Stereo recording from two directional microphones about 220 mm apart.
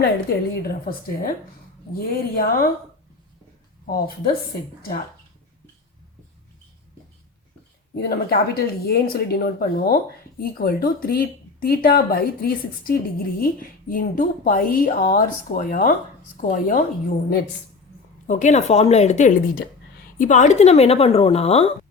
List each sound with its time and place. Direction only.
0.0 s a woman's voice: 45° left (ahead or behind)
3.8 s speech: 45° left (ahead or behind)
7.9 s a woman's voice: 45° left (ahead or behind)
18.3 s a woman's voice: 35° left (ahead or behind)